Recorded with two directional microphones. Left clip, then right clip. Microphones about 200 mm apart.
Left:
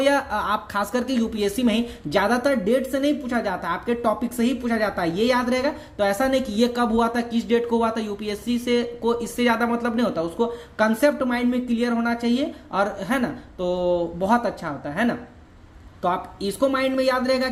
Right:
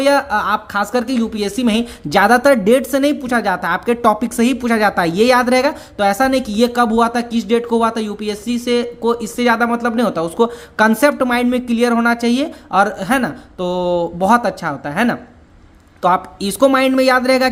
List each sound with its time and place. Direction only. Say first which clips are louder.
0.0 s a woman's voice: right 7 dB; 20° right (ahead or behind)